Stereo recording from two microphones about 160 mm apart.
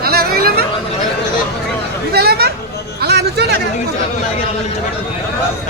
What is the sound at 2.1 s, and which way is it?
Chatter, 80° right.